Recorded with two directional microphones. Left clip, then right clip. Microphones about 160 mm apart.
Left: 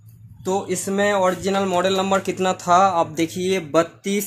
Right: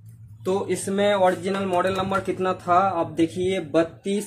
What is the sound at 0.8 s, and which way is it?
Speech, 60° left (ahead or behind).